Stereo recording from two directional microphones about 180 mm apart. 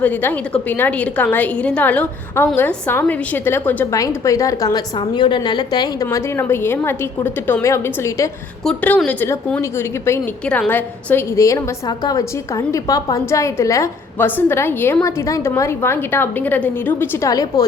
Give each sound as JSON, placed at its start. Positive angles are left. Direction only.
{"t": 0.0, "sound": "a woman's voice", "side_deg": 10}
{"t": 8.6, "sound": "a woman's voice", "side_deg": 5}